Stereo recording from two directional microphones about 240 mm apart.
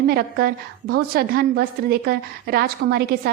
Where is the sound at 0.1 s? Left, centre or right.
Right.